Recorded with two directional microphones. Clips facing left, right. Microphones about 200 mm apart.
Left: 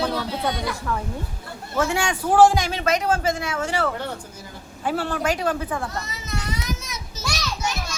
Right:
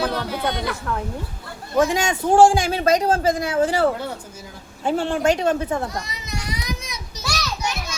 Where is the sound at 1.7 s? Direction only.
15° right (ahead or behind).